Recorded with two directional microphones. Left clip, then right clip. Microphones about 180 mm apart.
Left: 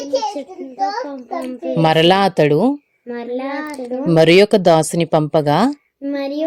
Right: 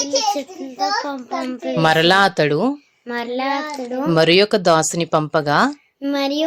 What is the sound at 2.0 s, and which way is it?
Speech, 40° left (ahead or behind).